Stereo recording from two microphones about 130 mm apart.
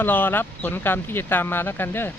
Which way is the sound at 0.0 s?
15° left (ahead or behind).